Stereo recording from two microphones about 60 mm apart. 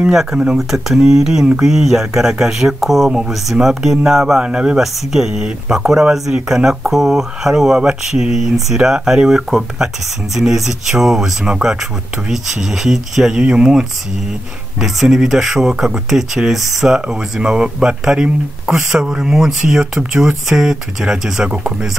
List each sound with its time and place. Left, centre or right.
0.0 s speech: centre
4.7 s speech: centre
12.8 s speech: centre